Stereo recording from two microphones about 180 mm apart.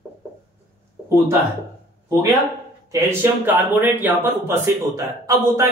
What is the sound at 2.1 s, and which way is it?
Speech, 15° right (ahead or behind).